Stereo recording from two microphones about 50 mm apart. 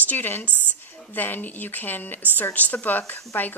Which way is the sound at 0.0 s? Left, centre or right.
Left.